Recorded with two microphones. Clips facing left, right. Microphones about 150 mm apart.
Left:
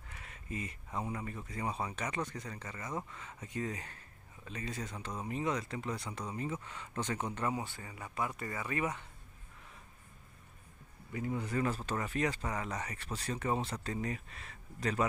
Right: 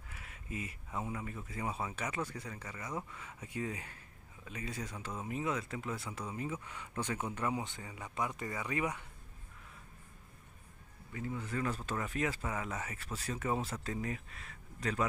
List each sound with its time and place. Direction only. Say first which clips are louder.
0.1 s speech: left 1 dB; 5° right (ahead or behind)
11.1 s speech: left 3 dB; 20° left (ahead or behind)
11.6 s speech: left 2 dB; centre (ahead or behind)